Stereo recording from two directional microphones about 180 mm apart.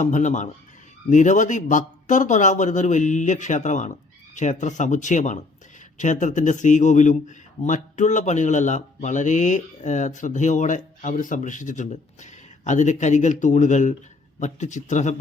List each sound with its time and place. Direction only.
0.0 s a man's voice: 45° left (ahead or behind)